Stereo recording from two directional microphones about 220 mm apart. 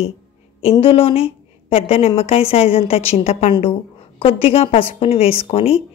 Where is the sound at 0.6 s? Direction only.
25° left (ahead or behind).